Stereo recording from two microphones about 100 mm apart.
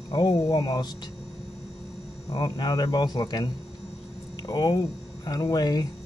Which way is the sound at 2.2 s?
40° left (ahead or behind).